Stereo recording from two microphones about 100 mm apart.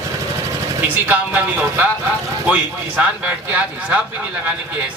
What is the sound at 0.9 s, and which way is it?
Speech, 15° right (ahead or behind).